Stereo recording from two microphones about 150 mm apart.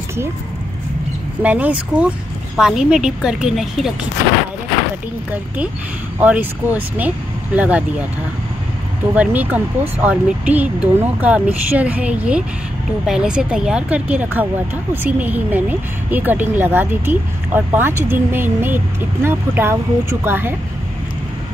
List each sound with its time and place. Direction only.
1.4 s speech: 10° right (ahead or behind)
6.1 s speech: 10° right (ahead or behind)
9.1 s speech: 10° right (ahead or behind)